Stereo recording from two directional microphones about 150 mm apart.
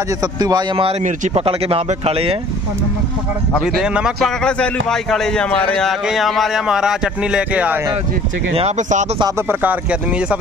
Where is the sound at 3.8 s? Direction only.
5° right (ahead or behind).